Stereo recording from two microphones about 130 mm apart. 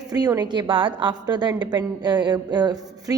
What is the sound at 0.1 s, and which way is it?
A woman's voice, 30° right (ahead or behind).